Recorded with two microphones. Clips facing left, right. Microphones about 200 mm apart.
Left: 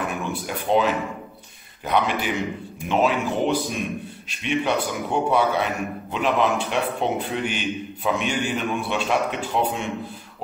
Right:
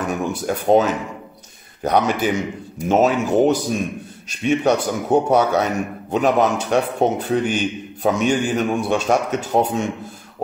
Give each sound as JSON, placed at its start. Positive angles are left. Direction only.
{"t": 0.1, "sound": "a man's voice", "side_deg": -45}